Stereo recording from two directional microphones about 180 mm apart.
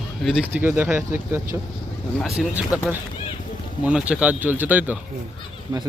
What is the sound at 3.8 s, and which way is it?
Speech, 5° right (ahead or behind).